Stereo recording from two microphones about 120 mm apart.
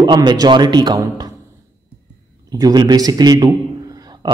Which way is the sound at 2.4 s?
30° right (ahead or behind).